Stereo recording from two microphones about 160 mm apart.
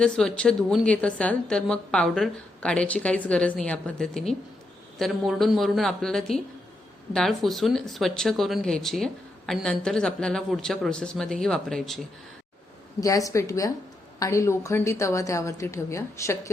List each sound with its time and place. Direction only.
0.0 s a woman's voice: 5° left (ahead or behind)
13.0 s a woman's voice: 20° left (ahead or behind)